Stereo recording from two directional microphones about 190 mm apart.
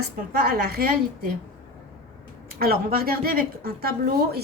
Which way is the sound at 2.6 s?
50° right (ahead or behind).